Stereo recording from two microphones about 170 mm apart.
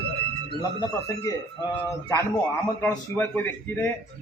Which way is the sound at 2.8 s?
10° left (ahead or behind).